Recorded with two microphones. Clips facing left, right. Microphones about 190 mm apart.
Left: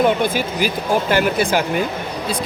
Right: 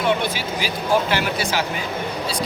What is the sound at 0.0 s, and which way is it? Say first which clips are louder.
Speech: left 5 dB; 50° left (ahead or behind).